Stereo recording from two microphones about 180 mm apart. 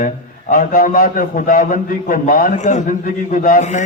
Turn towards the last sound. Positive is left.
turn(degrees=45)  # may be behind; listen again after turning